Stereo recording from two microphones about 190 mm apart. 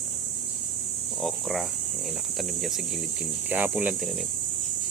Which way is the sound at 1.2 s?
Centre (ahead or behind).